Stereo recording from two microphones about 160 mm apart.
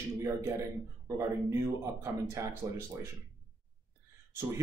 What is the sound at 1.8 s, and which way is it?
Speech, 15° right (ahead or behind).